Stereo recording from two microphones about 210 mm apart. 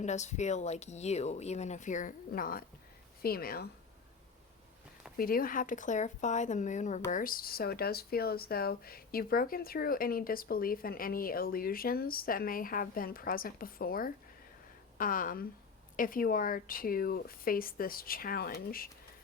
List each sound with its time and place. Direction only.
0.0 s speech: 35° left (ahead or behind)
5.1 s speech: 45° left (ahead or behind)